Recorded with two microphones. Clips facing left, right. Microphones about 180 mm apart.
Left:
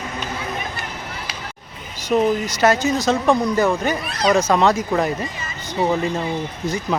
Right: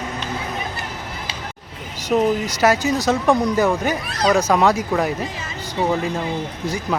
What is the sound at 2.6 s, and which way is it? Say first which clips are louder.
Speech: left 1 dB; 10° right (ahead or behind).